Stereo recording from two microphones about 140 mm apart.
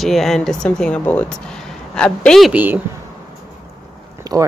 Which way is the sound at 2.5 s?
10° right (ahead or behind).